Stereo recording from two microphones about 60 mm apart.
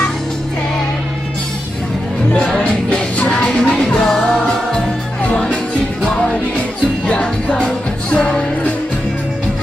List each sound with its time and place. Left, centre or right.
2.6 s music: centre
7.1 s music: left